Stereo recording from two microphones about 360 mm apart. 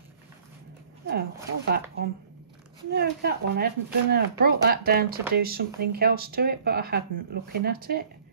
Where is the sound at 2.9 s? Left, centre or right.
Right.